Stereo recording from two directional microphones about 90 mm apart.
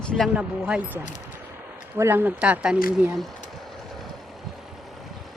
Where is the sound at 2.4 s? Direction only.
10° right (ahead or behind).